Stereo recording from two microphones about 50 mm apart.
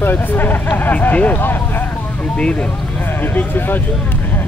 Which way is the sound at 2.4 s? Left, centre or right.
Centre.